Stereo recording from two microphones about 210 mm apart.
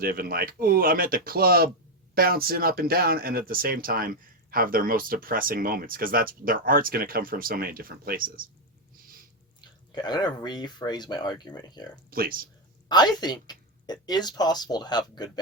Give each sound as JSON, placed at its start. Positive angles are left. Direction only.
{"t": 0.0, "sound": "speech", "side_deg": -45}
{"t": 9.6, "sound": "speech", "side_deg": 20}
{"t": 12.1, "sound": "speech", "side_deg": -45}
{"t": 12.9, "sound": "speech", "side_deg": 20}